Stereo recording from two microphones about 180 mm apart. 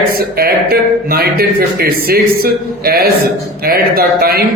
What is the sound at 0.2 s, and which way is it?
Speech, 55° right (ahead or behind).